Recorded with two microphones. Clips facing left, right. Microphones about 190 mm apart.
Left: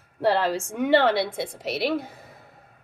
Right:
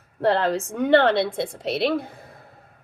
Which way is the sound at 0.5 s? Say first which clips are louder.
Right 3 dB; 10° left (ahead or behind).